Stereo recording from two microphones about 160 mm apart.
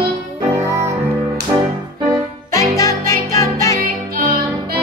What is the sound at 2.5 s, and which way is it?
Music, 20° left (ahead or behind).